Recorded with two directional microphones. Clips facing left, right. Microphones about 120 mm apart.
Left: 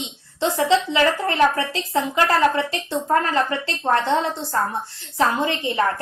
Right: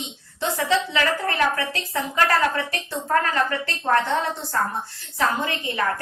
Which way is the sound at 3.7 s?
25° left (ahead or behind).